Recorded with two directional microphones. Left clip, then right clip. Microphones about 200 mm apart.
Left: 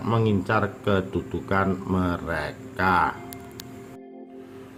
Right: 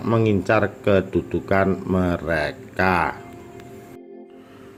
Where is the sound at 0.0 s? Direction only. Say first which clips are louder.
Right 4 dB; 15° right (ahead or behind).